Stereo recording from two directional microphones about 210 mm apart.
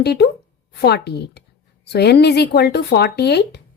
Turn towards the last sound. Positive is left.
turn(degrees=50)  # may be behind; listen again after turning